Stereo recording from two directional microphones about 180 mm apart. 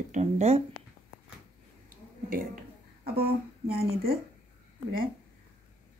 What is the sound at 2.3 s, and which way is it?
Speech, 55° right (ahead or behind).